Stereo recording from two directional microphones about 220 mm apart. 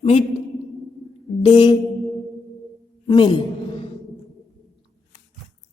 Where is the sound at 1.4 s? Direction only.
20° left (ahead or behind).